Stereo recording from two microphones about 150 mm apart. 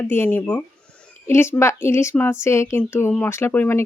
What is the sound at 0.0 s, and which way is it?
Speech, 10° left (ahead or behind).